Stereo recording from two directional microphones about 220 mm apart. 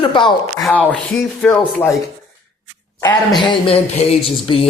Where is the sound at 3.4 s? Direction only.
25° left (ahead or behind).